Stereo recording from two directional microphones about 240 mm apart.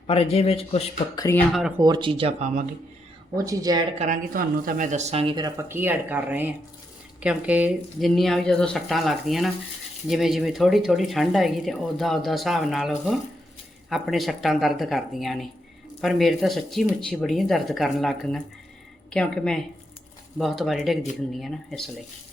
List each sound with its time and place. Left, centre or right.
0.1 s speech: left
1.2 s speech: centre
1.8 s speech: centre
3.3 s speech: centre
3.9 s speech: right; by 21.8 s centre